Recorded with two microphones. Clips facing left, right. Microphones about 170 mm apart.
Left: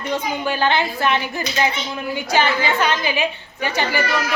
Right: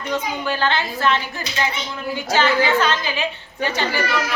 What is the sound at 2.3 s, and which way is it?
A woman's voice, 15° left (ahead or behind).